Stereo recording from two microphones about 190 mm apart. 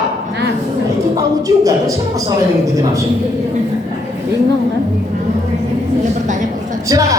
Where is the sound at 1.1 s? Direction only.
20° right (ahead or behind).